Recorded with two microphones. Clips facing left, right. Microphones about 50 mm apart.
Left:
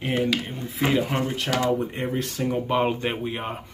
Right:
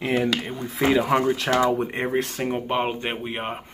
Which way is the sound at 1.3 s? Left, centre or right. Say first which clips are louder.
Right 4 dB; right.